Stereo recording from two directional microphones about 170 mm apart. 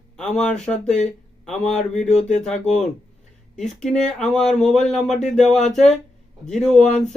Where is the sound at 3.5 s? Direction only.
Centre (ahead or behind).